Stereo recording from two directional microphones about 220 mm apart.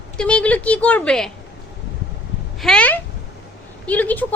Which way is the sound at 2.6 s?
5° left (ahead or behind).